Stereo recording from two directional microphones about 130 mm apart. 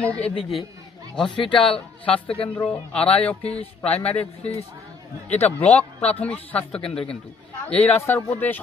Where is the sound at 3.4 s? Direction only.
50° left (ahead or behind).